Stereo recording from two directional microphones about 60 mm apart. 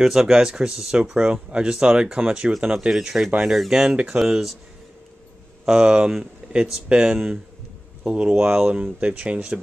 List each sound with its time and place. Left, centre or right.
0.0 s speech: centre
3.9 s speech: centre
4.2 s speech: centre
5.7 s speech: centre